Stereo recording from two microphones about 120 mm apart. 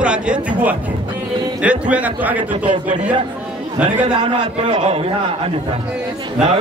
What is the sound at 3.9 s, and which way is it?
A man's voice, 45° right (ahead or behind).